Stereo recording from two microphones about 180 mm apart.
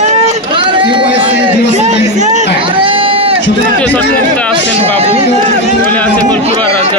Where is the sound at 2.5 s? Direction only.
30° right (ahead or behind).